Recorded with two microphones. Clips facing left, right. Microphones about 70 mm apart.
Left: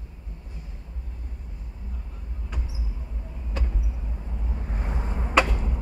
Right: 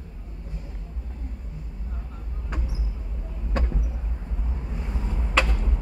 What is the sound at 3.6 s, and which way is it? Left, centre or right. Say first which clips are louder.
Vehicle: right 6 dB; right.